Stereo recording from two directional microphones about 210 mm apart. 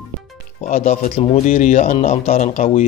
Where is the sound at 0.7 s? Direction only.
35° left (ahead or behind).